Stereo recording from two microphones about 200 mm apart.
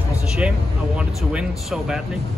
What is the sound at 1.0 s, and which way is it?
Speech, 5° right (ahead or behind).